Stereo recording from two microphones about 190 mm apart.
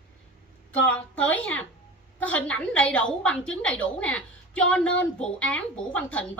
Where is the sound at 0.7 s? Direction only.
10° left (ahead or behind).